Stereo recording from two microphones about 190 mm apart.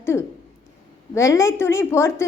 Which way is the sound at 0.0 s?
15° left (ahead or behind).